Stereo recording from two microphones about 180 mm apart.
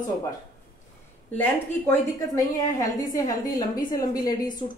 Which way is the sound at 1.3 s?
10° left (ahead or behind).